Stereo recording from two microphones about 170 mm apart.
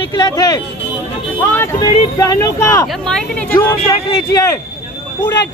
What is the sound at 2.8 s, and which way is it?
Speech, 5° left (ahead or behind).